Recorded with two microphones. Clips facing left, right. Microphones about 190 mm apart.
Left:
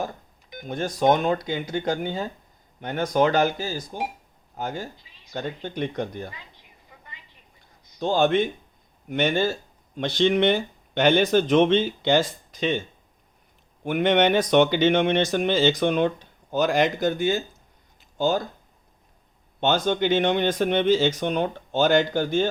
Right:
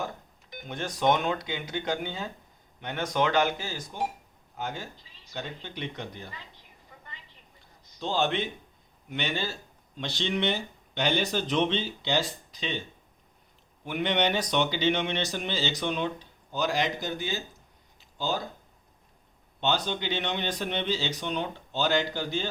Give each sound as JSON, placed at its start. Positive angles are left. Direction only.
{"t": 0.7, "sound": "speech", "side_deg": 40}
{"t": 7.9, "sound": "speech", "side_deg": 50}
{"t": 13.8, "sound": "speech", "side_deg": 50}
{"t": 19.5, "sound": "speech", "side_deg": 50}